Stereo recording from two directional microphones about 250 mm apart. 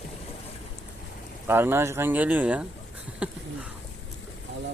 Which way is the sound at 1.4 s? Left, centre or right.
Centre.